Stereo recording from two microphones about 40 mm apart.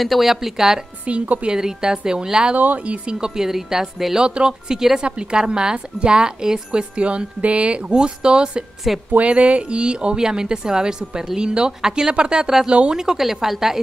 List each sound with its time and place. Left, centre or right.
0.0 s a woman's voice: centre
1.0 s a woman's voice: right
1.6 s a woman's voice: centre
2.5 s a woman's voice: right; by 4.3 s centre
4.3 s a woman's voice: right
5.0 s a woman's voice: right
8.9 s a woman's voice: centre
9.2 s a woman's voice: right; by 13.7 s centre